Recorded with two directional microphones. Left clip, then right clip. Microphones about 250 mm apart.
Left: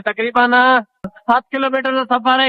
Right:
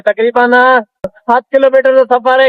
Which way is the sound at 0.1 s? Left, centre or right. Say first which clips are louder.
Right 5 dB; centre.